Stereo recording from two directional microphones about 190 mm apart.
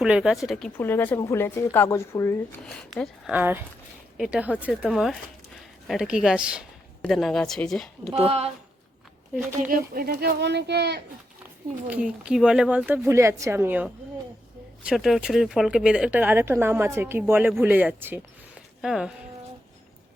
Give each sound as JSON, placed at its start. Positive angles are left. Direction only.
{"t": 0.0, "sound": "a woman's voice", "side_deg": 0}
{"t": 2.9, "sound": "a woman's voice", "side_deg": 5}
{"t": 3.3, "sound": "a woman's voice", "side_deg": -10}
{"t": 8.0, "sound": "speech", "side_deg": -30}
{"t": 9.6, "sound": "speech", "side_deg": -45}
{"t": 11.9, "sound": "speech", "side_deg": -5}